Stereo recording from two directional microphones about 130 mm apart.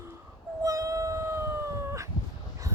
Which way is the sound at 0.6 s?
25° right (ahead or behind).